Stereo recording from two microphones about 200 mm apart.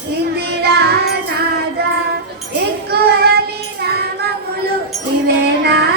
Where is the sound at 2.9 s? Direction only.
50° right (ahead or behind).